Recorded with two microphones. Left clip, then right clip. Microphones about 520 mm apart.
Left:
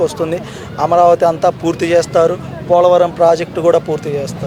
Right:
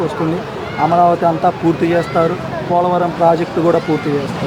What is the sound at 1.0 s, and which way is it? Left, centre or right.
Speech, left.